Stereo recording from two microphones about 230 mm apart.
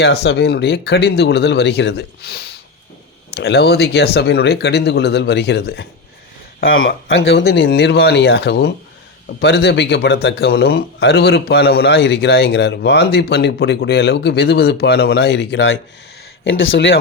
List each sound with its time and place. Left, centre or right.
0.0 s a man's voice: left
6.7 s a man's voice: left